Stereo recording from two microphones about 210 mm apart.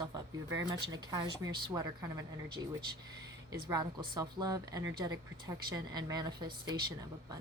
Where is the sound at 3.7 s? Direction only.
20° right (ahead or behind).